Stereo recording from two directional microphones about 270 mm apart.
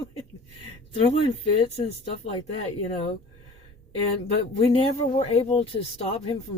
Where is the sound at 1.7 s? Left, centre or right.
Left.